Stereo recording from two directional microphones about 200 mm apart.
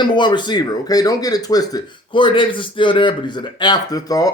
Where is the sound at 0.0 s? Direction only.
25° left (ahead or behind).